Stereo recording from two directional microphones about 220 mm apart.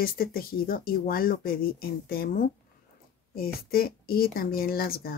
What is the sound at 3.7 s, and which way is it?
Speech, 45° left (ahead or behind).